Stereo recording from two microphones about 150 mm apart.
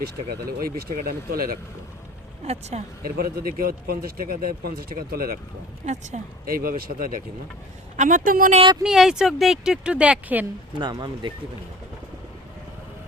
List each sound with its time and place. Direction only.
0.3 s speech: 90° right
2.4 s speech: 45° right (ahead or behind)
3.0 s speech: 80° right
5.8 s speech: 50° right (ahead or behind)
6.4 s speech: 75° right (ahead or behind)
7.9 s speech: 60° right (ahead or behind)
8.8 s speech: 5° right (ahead or behind)
10.8 s speech: 30° right (ahead or behind)